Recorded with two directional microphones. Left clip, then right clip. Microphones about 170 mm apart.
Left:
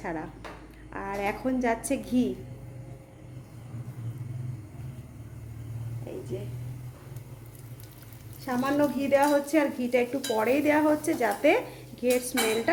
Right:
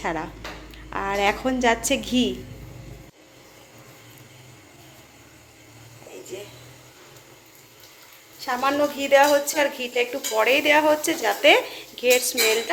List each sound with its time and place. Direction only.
0.0 s speech: 5° left (ahead or behind)
8.4 s speech: 5° right (ahead or behind)